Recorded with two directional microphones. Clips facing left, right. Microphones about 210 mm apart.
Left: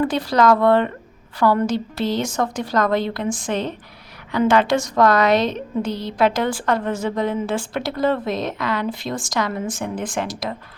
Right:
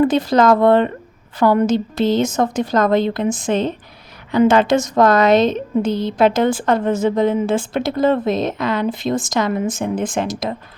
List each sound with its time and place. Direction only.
0.0 s a woman's voice: 20° right (ahead or behind)